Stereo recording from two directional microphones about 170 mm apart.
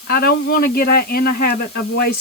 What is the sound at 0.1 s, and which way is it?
Speech, 65° left (ahead or behind).